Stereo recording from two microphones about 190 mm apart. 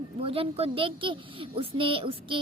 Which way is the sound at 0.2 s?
30° right (ahead or behind).